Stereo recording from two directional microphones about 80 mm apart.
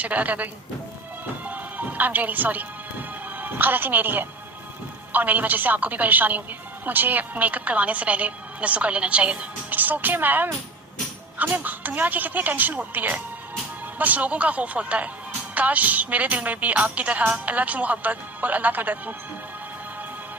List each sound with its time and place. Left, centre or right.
0.0 s a woman's voice: centre